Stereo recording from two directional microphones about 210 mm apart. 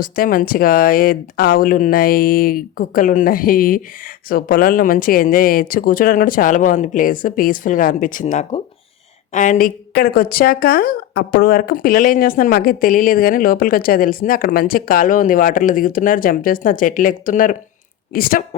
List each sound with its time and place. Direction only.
0.0 s speech: 45° left (ahead or behind)